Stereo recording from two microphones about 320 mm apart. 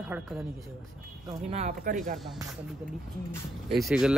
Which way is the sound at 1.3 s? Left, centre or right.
Centre.